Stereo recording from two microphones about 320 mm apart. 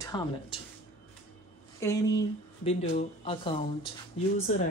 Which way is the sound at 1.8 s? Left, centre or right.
Centre.